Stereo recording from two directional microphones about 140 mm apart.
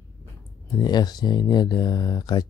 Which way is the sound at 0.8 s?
30° left (ahead or behind).